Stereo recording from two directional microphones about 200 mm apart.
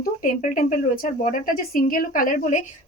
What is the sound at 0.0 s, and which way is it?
A woman's voice, 40° left (ahead or behind).